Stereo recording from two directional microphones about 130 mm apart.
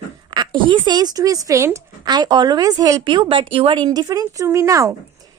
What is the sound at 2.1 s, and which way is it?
A woman's voice, 35° right (ahead or behind).